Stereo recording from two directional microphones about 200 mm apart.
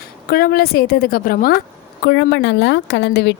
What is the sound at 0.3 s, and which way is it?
A woman's voice, 50° left (ahead or behind).